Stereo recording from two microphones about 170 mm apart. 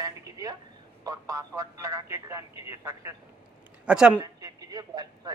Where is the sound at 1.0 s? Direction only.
20° right (ahead or behind).